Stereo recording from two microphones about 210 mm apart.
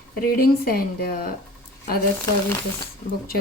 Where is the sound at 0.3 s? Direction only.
45° left (ahead or behind).